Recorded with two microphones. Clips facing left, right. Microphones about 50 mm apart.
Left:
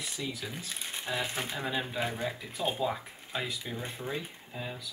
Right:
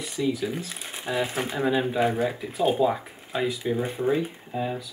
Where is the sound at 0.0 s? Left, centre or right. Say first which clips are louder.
Right 11 dB; centre.